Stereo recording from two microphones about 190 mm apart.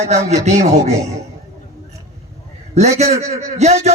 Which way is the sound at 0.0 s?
35° right (ahead or behind).